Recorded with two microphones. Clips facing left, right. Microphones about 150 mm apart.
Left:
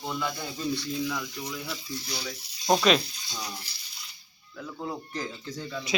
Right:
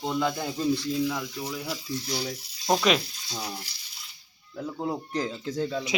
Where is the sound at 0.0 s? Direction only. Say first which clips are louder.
Right 5 dB; 25° right (ahead or behind).